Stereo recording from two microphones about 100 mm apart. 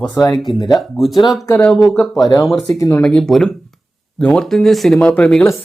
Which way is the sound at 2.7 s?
30° left (ahead or behind).